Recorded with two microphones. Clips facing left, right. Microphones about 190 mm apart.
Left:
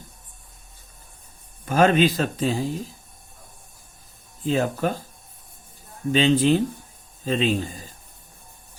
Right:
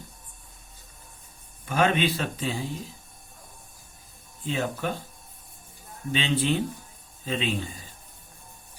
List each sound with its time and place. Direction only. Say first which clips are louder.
1.6 s speech: left 6 dB; 40° left (ahead or behind)
4.4 s speech: left 6 dB; 40° left (ahead or behind)
6.1 s speech: left 8 dB; 40° left (ahead or behind)